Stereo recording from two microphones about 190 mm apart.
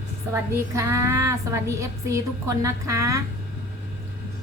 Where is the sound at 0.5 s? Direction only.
15° right (ahead or behind).